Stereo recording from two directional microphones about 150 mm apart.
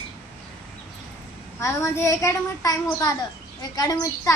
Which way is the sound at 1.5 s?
20° left (ahead or behind).